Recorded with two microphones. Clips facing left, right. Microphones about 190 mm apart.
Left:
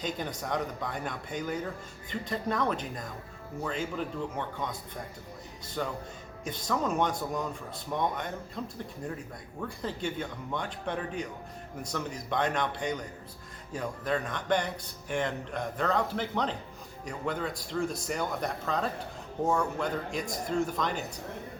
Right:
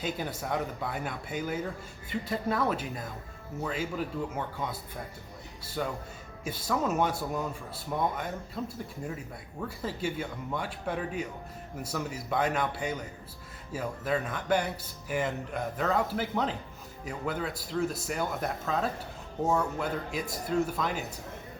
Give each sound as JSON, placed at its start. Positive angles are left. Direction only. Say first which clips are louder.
{"t": 0.0, "sound": "speech", "louder": "right 1 dB", "side_deg": -5}